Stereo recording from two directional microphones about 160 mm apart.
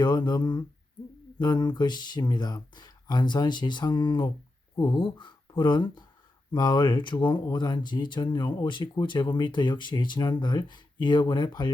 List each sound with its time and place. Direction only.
0.0 s speech: 25° left (ahead or behind)